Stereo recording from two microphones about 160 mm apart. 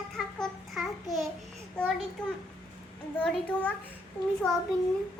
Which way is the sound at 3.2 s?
5° left (ahead or behind).